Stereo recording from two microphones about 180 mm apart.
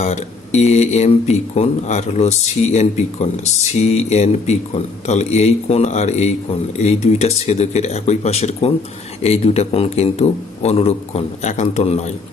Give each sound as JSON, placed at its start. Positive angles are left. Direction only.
{"t": 0.0, "sound": "speech", "side_deg": 40}